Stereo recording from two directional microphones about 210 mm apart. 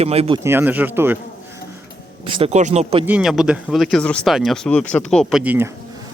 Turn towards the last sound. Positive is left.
turn(degrees=-10)  # may be behind; listen again after turning